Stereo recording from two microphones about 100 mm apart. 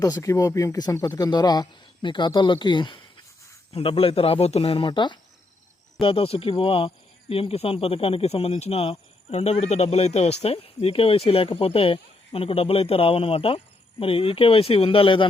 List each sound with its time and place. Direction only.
0.0 s speech: 35° left (ahead or behind); by 3.0 s 55° left (ahead or behind)
3.7 s speech: 70° left (ahead or behind); by 5.1 s 55° left (ahead or behind)
6.0 s speech: 65° left (ahead or behind)